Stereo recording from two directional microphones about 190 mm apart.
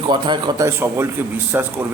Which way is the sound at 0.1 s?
25° right (ahead or behind).